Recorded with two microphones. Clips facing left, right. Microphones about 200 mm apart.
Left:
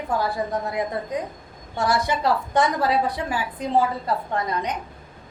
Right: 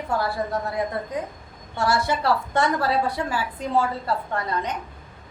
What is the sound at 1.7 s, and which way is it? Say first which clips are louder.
A woman's voice: even; 20° left (ahead or behind).